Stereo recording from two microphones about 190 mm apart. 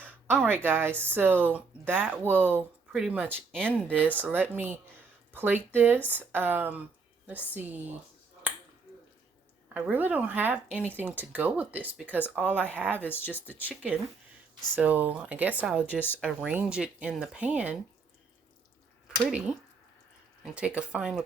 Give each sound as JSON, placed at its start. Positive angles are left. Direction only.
{"t": 0.0, "sound": "speech", "side_deg": -10}
{"t": 9.7, "sound": "speech", "side_deg": -10}
{"t": 13.0, "sound": "speech", "side_deg": 10}
{"t": 14.8, "sound": "speech", "side_deg": -10}
{"t": 16.0, "sound": "speech", "side_deg": 10}
{"t": 16.2, "sound": "speech", "side_deg": -5}
{"t": 19.0, "sound": "speech", "side_deg": -5}